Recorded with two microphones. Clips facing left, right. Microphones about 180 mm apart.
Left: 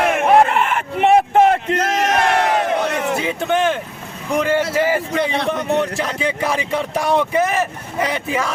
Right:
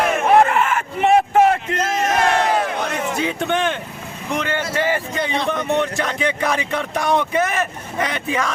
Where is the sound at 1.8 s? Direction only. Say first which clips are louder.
Left 2 dB; 75° left (ahead or behind).